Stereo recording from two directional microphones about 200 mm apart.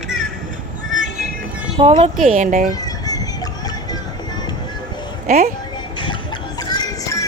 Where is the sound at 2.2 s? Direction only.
40° right (ahead or behind).